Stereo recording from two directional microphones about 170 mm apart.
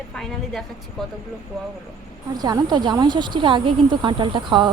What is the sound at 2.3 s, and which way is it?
Speech, 25° right (ahead or behind).